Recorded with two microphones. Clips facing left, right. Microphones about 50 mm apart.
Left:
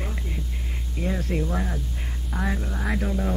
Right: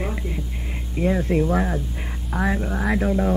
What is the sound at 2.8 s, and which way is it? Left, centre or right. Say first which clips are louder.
Speech: right 6 dB; centre.